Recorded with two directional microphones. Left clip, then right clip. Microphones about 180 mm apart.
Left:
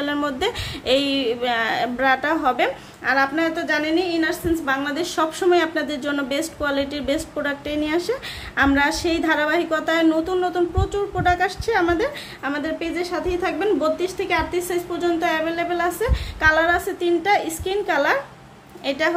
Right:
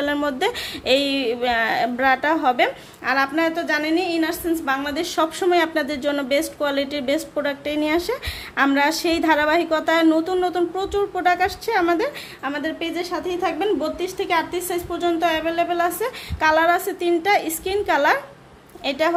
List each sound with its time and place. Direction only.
0.0 s a woman's voice: 20° right (ahead or behind)